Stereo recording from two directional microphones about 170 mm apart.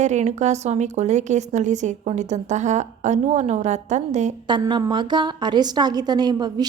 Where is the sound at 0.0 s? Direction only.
45° right (ahead or behind).